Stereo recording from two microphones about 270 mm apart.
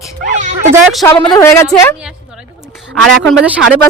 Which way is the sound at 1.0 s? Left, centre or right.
Centre.